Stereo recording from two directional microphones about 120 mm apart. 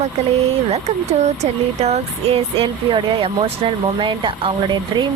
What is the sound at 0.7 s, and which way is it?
Speech, 65° right (ahead or behind).